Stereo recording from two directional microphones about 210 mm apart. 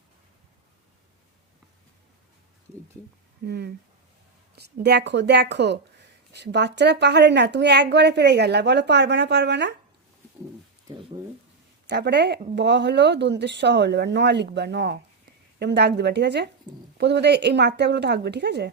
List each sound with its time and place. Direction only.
3.4 s speech: 50° right (ahead or behind)
11.9 s speech: 55° right (ahead or behind)